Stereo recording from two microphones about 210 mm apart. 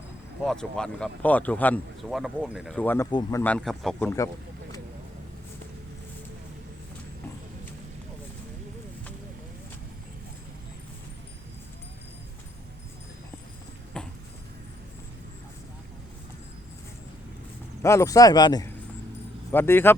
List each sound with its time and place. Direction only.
0.4 s speech: 5° left (ahead or behind)
2.7 s speech: 10° left (ahead or behind)
14.0 s clip-clop: 5° left (ahead or behind)
17.8 s speech: 15° left (ahead or behind)